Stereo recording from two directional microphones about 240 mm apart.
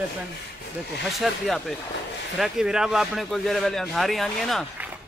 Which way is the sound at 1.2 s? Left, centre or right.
Centre.